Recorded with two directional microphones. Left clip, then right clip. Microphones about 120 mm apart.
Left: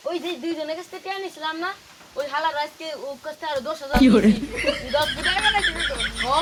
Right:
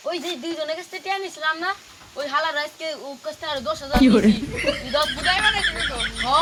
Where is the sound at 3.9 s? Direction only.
Centre (ahead or behind).